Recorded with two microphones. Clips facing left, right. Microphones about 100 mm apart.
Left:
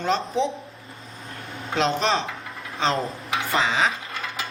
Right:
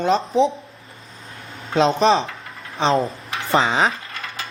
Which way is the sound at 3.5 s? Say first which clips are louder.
Right 5 dB; 35° right (ahead or behind).